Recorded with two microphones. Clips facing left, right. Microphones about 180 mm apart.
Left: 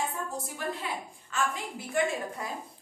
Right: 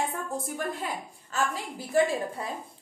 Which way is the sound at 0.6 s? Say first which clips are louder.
Even; 50° right (ahead or behind).